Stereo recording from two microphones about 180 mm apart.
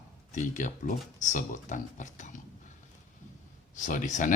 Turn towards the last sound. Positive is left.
turn(degrees=45)  # may be behind; listen again after turning